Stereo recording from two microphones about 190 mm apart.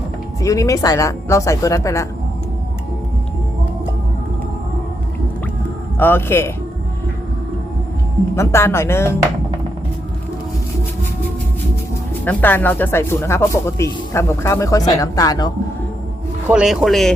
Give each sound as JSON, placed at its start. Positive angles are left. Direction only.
{"t": 0.4, "sound": "speech", "side_deg": 15}
{"t": 6.0, "sound": "speech", "side_deg": 10}
{"t": 8.4, "sound": "speech", "side_deg": 15}
{"t": 12.2, "sound": "speech", "side_deg": 10}
{"t": 16.5, "sound": "speech", "side_deg": -5}